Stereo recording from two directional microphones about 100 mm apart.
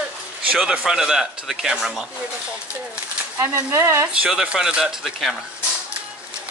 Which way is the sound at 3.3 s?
25° right (ahead or behind).